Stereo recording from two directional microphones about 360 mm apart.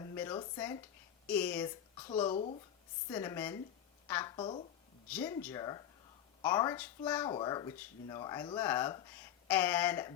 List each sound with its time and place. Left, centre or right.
0.0 s a sound: centre
1.3 s speech: centre
2.3 s speech: centre